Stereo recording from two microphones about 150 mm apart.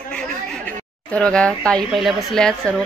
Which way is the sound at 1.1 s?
5° left (ahead or behind).